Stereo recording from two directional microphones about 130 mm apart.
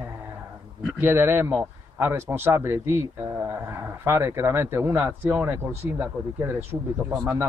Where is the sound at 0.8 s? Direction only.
15° right (ahead or behind).